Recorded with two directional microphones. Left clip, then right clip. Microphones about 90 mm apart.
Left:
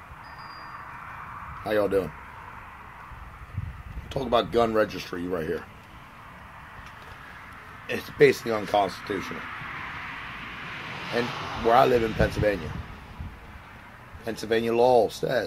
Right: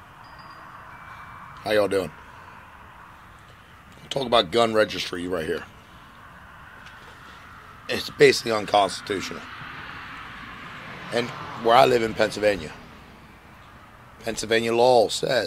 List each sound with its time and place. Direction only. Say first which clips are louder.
1.6 s a man's voice: right 3 dB; 20° right (ahead or behind)
4.1 s speech: right 3 dB; 15° right (ahead or behind)
7.8 s speech: right 2 dB; 20° right (ahead or behind)
11.1 s speech: right 2 dB; 25° right (ahead or behind)
14.2 s speech: right 3 dB; 20° right (ahead or behind)